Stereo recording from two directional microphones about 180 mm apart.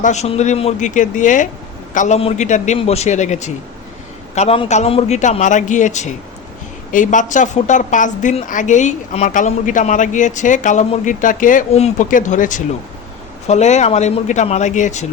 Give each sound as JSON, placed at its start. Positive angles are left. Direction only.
{"t": 0.0, "sound": "a woman's voice", "side_deg": 40}